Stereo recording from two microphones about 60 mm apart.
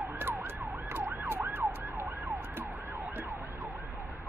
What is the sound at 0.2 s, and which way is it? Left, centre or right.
Emergency vehicle, right.